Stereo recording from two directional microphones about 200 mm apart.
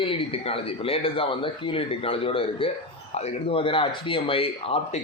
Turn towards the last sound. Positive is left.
turn(degrees=30)  # may be behind; listen again after turning